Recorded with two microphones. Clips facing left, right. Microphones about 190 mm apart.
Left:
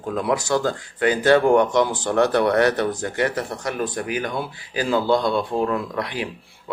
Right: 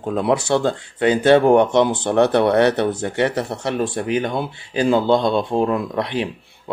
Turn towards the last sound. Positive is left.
turn(degrees=-25)  # may be behind; listen again after turning